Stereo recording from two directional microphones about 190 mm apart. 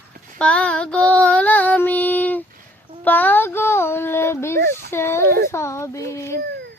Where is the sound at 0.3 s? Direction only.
5° left (ahead or behind).